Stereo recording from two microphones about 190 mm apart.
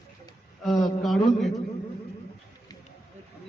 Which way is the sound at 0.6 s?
Centre (ahead or behind).